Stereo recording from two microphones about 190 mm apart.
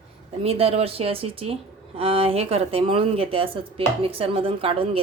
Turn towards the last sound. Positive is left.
turn(degrees=-30)  # may be behind; listen again after turning